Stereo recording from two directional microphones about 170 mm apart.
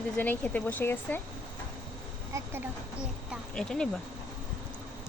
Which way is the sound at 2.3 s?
15° right (ahead or behind).